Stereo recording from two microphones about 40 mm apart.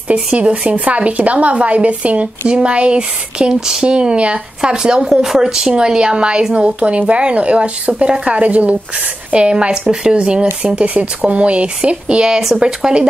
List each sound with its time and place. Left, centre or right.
0.1 s a woman's voice: right
5.0 s a woman's voice: centre